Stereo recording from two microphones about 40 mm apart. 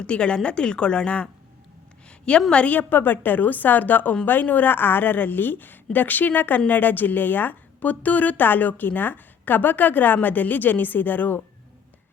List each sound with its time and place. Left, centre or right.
0.0 s speech: left
2.0 s a sound: left
2.5 s speech: left
2.7 s a woman's voice: left